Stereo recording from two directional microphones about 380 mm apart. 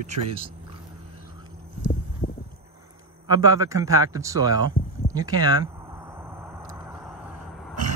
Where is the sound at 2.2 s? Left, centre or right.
Centre.